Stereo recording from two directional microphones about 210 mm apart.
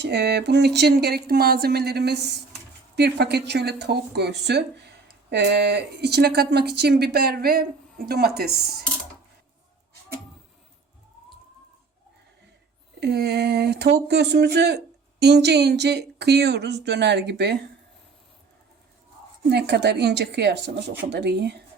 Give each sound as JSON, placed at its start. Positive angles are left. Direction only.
{"t": 0.0, "sound": "speech", "side_deg": -55}
{"t": 13.0, "sound": "speech", "side_deg": -50}
{"t": 19.5, "sound": "speech", "side_deg": -50}